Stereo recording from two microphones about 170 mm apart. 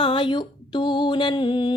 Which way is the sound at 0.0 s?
30° left (ahead or behind).